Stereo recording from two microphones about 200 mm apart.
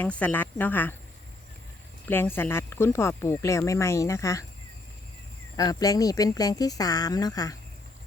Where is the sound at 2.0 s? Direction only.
10° left (ahead or behind).